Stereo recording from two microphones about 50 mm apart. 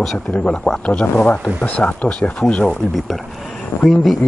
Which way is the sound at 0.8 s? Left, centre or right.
Left.